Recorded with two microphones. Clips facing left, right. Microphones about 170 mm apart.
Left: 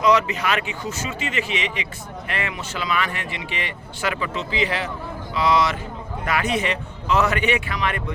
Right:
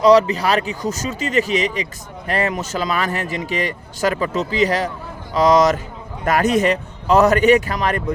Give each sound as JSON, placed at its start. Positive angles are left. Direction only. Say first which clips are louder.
{"t": 0.0, "sound": "speech", "louder": "right 6 dB", "side_deg": -35}